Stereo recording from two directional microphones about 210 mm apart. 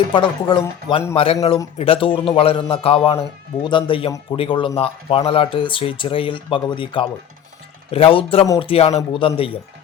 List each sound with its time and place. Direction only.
0.1 s speech: 20° left (ahead or behind)